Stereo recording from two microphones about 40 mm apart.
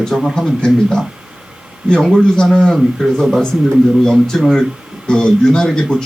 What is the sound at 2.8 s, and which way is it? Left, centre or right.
Speech, centre.